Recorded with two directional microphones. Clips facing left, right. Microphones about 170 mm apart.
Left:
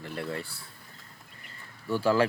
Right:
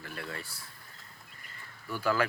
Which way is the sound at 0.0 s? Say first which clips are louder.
Left 6 dB; 25° left (ahead or behind).